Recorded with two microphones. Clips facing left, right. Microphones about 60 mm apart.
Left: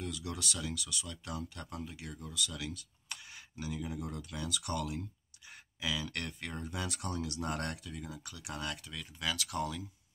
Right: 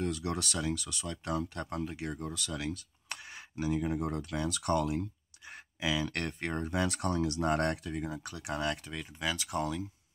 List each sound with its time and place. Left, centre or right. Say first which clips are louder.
0.0 s speech: right 6 dB; right
5.5 s a sound: right 5 dB; right
6.1 s speech: right 6 dB; right
7.2 s speech: right 10 dB; right